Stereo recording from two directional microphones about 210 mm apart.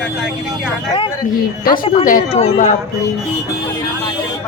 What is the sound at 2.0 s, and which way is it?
Speech, 35° left (ahead or behind).